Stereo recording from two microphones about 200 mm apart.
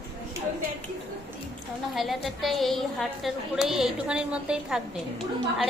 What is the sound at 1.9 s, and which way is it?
A woman's voice, centre (ahead or behind).